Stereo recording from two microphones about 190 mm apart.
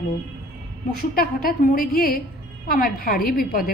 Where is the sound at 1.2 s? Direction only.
50° left (ahead or behind).